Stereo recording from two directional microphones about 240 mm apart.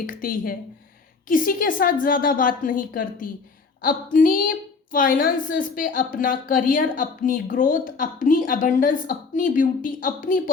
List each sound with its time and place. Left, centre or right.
0.0 s a woman's voice: left